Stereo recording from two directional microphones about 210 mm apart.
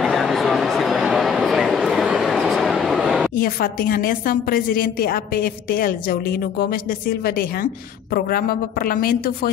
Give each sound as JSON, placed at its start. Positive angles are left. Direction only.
{"t": 0.0, "sound": "bow-wow", "side_deg": 0}
{"t": 3.3, "sound": "a woman's voice", "side_deg": 45}